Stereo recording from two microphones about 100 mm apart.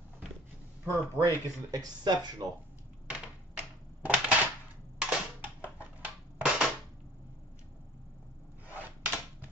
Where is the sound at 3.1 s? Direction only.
15° right (ahead or behind).